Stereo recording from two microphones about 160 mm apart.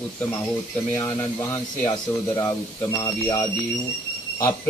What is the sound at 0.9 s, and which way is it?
Speech, 15° left (ahead or behind).